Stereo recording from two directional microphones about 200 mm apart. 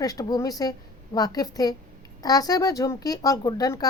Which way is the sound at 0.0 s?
20° left (ahead or behind).